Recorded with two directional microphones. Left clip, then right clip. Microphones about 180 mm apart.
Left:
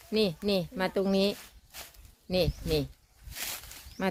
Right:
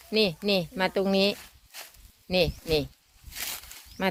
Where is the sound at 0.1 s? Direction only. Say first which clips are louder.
Right 3 dB; centre (ahead or behind).